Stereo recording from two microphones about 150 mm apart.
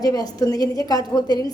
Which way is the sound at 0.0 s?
25° left (ahead or behind).